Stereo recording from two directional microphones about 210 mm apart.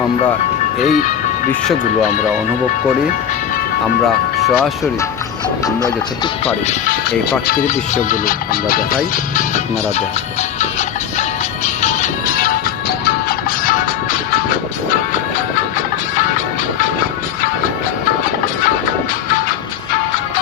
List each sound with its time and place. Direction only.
0.8 s speech: 35° left (ahead or behind)
4.0 s speech: centre (ahead or behind)
6.4 s speech: 30° left (ahead or behind)
7.1 s speech: 50° left (ahead or behind)
10.6 s music: 35° left (ahead or behind)
16.7 s music: 40° left (ahead or behind)